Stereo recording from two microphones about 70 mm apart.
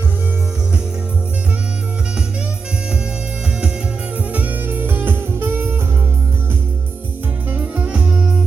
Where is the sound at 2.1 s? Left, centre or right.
Centre; by 6.1 s right.